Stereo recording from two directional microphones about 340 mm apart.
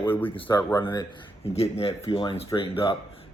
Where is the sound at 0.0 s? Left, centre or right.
Centre.